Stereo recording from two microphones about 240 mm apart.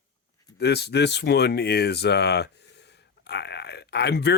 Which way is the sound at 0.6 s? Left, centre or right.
Left.